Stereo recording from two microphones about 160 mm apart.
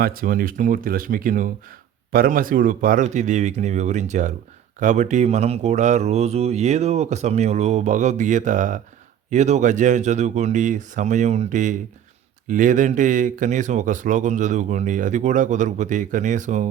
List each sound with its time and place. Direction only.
0.0 s speech: 60° right (ahead or behind)